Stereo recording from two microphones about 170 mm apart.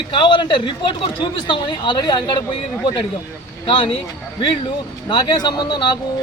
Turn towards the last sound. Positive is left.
turn(degrees=25)  # may be behind; listen again after turning